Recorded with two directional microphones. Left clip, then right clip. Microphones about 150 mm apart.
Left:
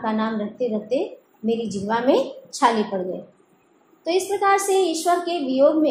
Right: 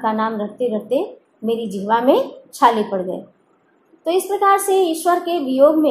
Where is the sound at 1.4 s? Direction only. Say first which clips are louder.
Right 4 dB; 35° right (ahead or behind).